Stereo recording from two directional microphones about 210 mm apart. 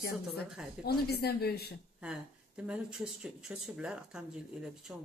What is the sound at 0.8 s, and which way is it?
Speech, 50° left (ahead or behind).